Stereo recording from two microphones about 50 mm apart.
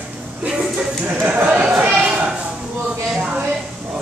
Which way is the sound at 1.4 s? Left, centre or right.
Right.